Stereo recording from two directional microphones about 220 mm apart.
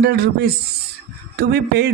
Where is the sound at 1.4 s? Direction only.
45° right (ahead or behind).